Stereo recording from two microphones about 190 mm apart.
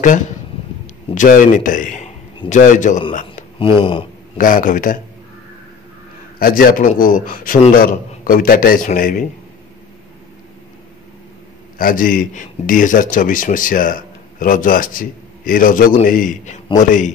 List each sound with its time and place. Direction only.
1.1 s a man's voice: 45° left (ahead or behind)
3.5 s speech: 30° left (ahead or behind)
4.4 s a man's voice: 45° left (ahead or behind)
6.4 s a man's voice: 50° left (ahead or behind)
11.8 s a man's voice: 45° left (ahead or behind)